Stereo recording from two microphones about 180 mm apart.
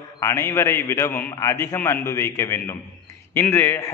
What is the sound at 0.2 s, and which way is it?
A man's voice, 15° left (ahead or behind).